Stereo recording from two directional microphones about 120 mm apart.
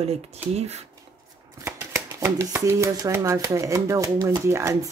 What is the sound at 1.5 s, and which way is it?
Speech, 25° right (ahead or behind).